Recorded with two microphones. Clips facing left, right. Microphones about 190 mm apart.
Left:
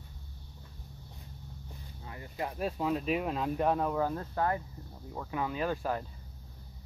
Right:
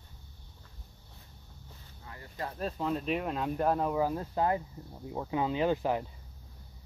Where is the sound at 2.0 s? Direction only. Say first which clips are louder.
Left 2 dB; 15° left (ahead or behind); by 6.0 s 20° right (ahead or behind).